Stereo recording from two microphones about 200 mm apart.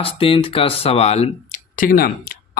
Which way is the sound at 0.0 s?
25° left (ahead or behind).